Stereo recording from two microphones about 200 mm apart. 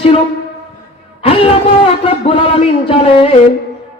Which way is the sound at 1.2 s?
30° left (ahead or behind).